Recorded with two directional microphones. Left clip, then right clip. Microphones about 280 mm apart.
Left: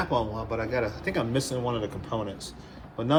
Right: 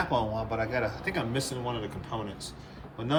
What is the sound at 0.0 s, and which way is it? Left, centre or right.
Speech, centre.